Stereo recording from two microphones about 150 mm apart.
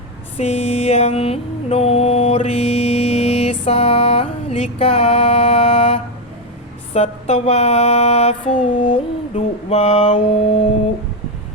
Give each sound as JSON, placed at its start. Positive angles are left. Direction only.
{"t": 0.3, "sound": "mantra", "side_deg": 45}